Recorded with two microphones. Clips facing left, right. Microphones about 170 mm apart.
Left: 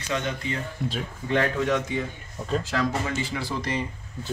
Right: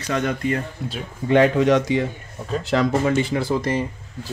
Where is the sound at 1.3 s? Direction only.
90° right.